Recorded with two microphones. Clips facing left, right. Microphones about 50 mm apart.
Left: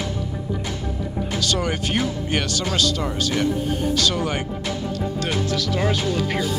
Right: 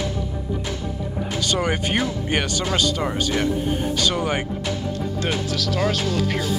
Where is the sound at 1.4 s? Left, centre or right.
Right.